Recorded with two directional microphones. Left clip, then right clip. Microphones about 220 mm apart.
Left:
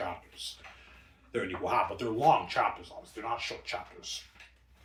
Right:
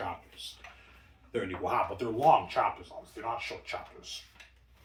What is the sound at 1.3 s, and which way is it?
Speech, 10° right (ahead or behind).